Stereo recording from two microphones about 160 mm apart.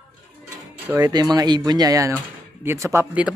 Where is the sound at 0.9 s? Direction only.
25° right (ahead or behind).